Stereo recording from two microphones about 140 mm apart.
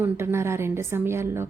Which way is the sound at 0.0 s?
20° right (ahead or behind).